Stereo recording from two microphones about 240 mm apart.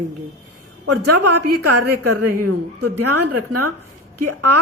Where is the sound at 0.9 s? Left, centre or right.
Right.